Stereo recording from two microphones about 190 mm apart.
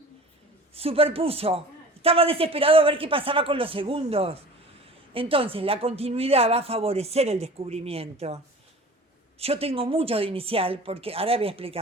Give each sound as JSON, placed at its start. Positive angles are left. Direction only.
{"t": 0.7, "sound": "a man's voice", "side_deg": -30}
{"t": 9.4, "sound": "a man's voice", "side_deg": -30}